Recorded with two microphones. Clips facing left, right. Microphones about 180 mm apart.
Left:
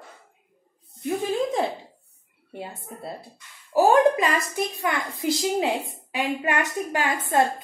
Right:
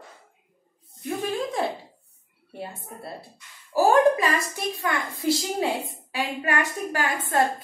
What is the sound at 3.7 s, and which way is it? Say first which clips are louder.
A woman's voice: left 1 dB; 15° left (ahead or behind).